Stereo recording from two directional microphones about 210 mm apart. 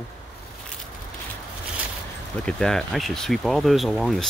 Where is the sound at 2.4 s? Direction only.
5° left (ahead or behind).